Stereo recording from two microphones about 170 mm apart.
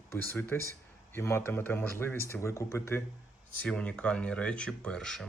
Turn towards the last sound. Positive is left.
turn(degrees=5)  # may be behind; listen again after turning